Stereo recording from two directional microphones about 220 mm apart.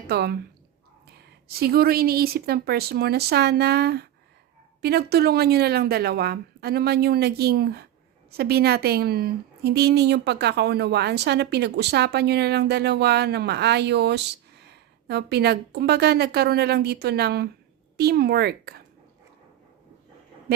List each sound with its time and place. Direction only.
0.1 s a woman's voice: 45° right (ahead or behind)
1.5 s a woman's voice: 45° right (ahead or behind)